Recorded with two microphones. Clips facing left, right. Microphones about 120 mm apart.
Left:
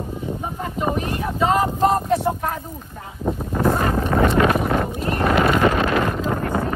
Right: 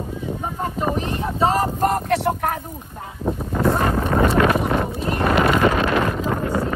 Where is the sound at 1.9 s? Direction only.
70° right (ahead or behind).